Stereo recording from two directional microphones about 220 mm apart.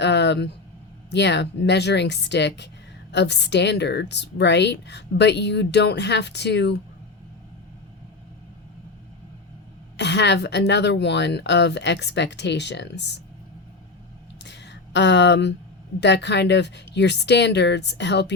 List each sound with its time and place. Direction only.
0.0 s a woman's voice: 50° left (ahead or behind)
10.0 s a woman's voice: 50° left (ahead or behind)
14.4 s a sound: 50° left (ahead or behind)
16.0 s a woman's voice: 50° left (ahead or behind)